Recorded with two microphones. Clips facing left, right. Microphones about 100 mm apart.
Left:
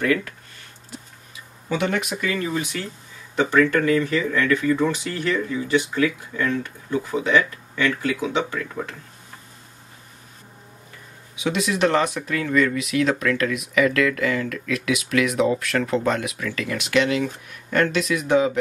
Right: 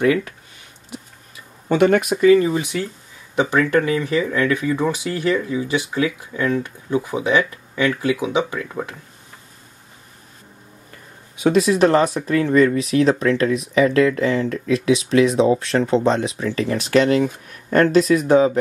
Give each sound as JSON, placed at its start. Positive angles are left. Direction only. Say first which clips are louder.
{"t": 0.0, "sound": "speech", "louder": "right 4 dB", "side_deg": -20}
{"t": 1.7, "sound": "speech", "louder": "right 8 dB", "side_deg": -50}
{"t": 2.2, "sound": "speech", "louder": "right 11 dB", "side_deg": -25}
{"t": 11.3, "sound": "speech", "louder": "right 8 dB", "side_deg": -40}